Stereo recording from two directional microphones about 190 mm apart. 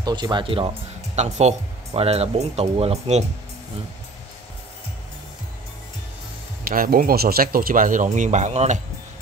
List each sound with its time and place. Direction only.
0.0 s speech: 20° right (ahead or behind)
6.7 s speech: 50° right (ahead or behind)